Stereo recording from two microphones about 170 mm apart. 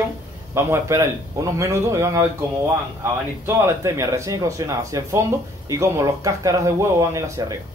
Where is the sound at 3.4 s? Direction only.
15° right (ahead or behind).